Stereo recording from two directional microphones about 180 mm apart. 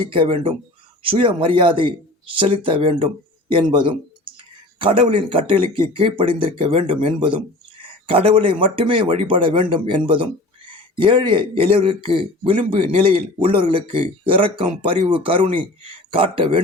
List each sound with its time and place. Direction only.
0.0 s speech: 30° right (ahead or behind)